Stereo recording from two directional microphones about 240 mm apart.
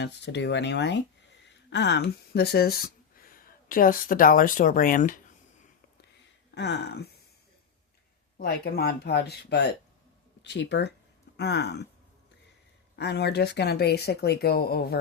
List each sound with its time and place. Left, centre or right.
0.0 s speech: left
6.5 s a sound: left
8.4 s speech: left
13.0 s speech: left